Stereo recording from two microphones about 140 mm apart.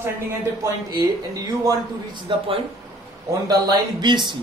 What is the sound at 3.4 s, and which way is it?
Speech, 30° right (ahead or behind).